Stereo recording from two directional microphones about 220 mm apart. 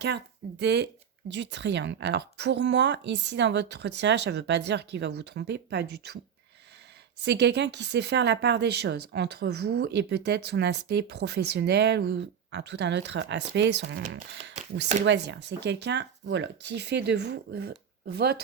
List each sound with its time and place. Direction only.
0.6 s a woman's voice: 50° right (ahead or behind)
7.2 s a woman's voice: 50° right (ahead or behind)